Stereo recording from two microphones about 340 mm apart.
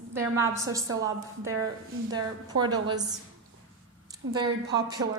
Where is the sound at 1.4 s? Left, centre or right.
Right.